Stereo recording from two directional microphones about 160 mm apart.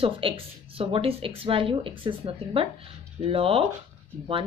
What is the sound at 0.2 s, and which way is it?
Speech, 35° right (ahead or behind).